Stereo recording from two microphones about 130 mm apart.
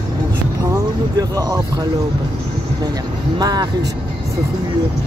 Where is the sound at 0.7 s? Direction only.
30° right (ahead or behind).